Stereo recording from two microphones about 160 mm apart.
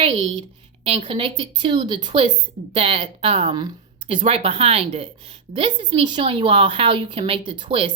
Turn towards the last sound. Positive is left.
turn(degrees=-30)  # may be behind; listen again after turning